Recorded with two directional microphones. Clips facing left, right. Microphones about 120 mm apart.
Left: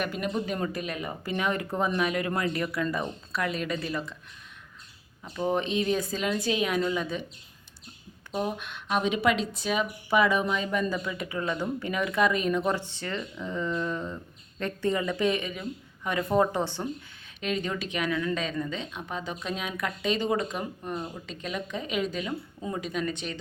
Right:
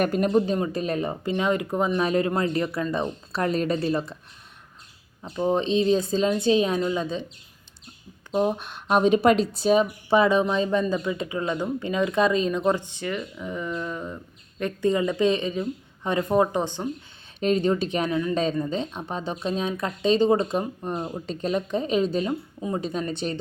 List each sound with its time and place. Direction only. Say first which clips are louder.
0.0 s speech: right 9 dB; 45° right (ahead or behind)
1.2 s speech: right 2 dB; 25° right (ahead or behind)
2.0 s speech: right 5 dB; 30° right (ahead or behind)
5.2 s speech: right 4 dB; 20° right (ahead or behind)
8.3 s speech: right 7 dB; 35° right (ahead or behind); by 16.9 s 15° right (ahead or behind)
17.4 s speech: right 9 dB; 35° right (ahead or behind)